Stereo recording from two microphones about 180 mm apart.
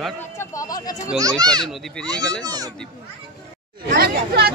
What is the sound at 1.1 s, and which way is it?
Speech, 20° right (ahead or behind).